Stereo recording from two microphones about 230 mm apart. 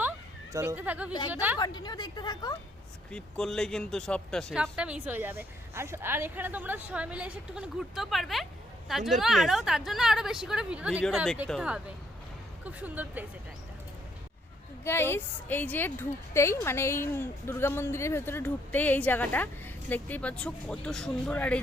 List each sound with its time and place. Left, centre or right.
0.5 s speech: centre
1.5 s a woman's voice: centre
3.1 s speech: centre
14.8 s a woman's voice: centre